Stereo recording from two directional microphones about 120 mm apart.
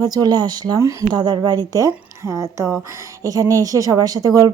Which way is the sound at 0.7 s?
25° right (ahead or behind).